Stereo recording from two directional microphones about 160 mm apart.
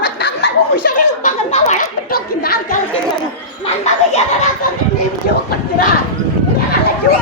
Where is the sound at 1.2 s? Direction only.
50° left (ahead or behind).